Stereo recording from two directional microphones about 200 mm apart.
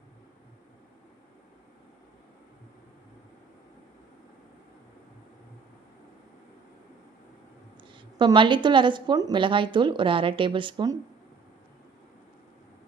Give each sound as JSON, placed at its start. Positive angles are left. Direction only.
{"t": 7.9, "sound": "a woman's voice", "side_deg": -25}